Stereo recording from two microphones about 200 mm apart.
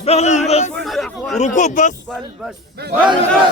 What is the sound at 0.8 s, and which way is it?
Speech, centre (ahead or behind).